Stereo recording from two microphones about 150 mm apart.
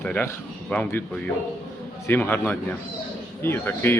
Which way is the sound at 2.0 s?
15° left (ahead or behind).